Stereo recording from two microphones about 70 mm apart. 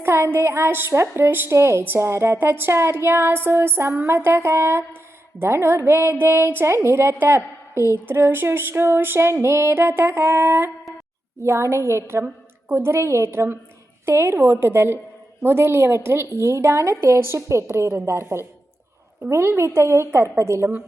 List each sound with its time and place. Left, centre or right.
0.0 s a woman's voice: right